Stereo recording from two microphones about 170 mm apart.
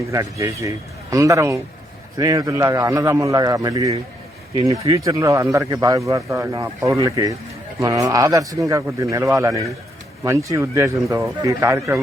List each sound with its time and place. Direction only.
0.1 s speech: 20° right (ahead or behind)